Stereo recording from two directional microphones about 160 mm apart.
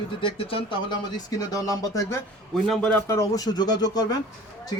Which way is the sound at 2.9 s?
20° left (ahead or behind).